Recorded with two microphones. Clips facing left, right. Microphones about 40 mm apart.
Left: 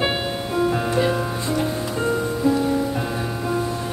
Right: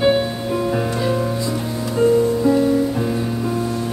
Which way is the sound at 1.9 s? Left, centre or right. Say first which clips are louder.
Right 7 dB; centre.